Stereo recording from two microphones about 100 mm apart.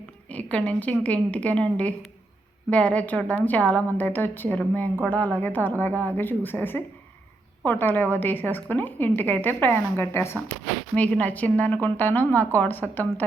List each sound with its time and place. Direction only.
0.3 s a woman's voice: 15° left (ahead or behind)